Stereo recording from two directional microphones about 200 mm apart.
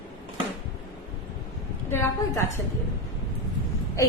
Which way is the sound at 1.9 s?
10° left (ahead or behind).